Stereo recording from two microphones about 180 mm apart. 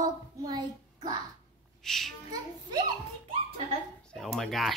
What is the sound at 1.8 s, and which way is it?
Speech, centre (ahead or behind).